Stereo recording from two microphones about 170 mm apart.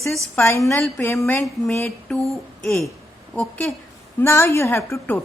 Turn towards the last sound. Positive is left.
turn(degrees=10)  # may be behind; listen again after turning